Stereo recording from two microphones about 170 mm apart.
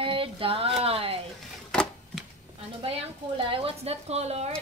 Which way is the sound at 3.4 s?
35° right (ahead or behind).